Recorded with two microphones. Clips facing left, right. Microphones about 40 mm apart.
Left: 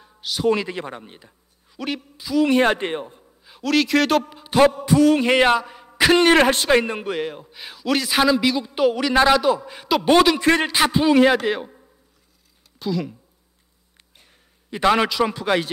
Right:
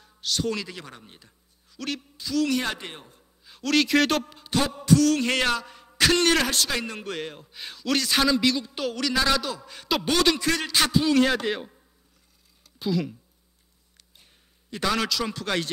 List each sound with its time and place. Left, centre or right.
0.0 s a sound: centre
0.5 s a man's voice: left
2.5 s speech: left
3.4 s a man's voice: centre
4.3 s music: centre
7.1 s a man's voice: centre
9.3 s music: centre
9.9 s a man's voice: centre
10.4 s speech: left
10.9 s music: left
12.7 s speech: centre
14.7 s music: left